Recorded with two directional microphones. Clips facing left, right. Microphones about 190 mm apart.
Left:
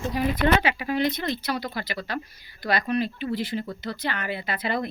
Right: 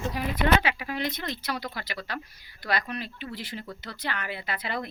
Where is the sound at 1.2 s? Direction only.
5° left (ahead or behind).